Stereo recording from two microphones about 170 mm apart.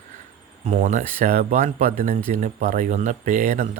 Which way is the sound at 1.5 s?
40° right (ahead or behind).